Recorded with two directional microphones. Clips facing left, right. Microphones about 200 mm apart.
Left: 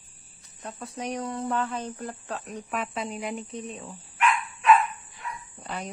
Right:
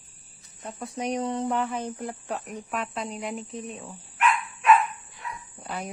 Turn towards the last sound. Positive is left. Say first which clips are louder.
# right 1 dB
turn(degrees=-5)  # may be behind; listen again after turning